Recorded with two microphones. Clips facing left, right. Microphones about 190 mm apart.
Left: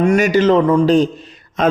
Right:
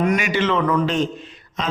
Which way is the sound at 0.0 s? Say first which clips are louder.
Left 7 dB; 35° left (ahead or behind).